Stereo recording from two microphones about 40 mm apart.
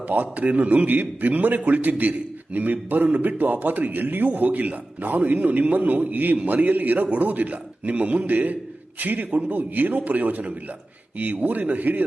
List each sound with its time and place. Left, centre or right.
0.1 s a man's voice: right